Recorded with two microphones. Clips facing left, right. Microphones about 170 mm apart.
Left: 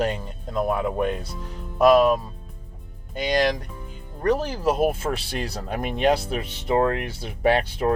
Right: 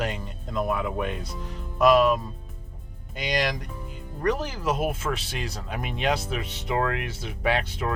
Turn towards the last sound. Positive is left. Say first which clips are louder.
# left 6 dB
turn(degrees=40)  # may be behind; listen again after turning